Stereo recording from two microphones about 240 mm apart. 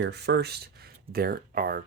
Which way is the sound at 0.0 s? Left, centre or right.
Right.